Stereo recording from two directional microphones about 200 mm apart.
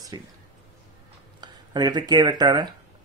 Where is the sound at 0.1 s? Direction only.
20° right (ahead or behind).